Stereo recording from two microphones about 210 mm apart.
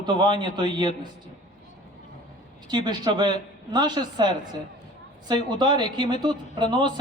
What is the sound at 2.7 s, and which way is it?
A man's voice, 20° right (ahead or behind).